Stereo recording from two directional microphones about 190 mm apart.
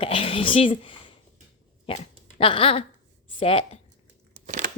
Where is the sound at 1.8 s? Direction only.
30° left (ahead or behind).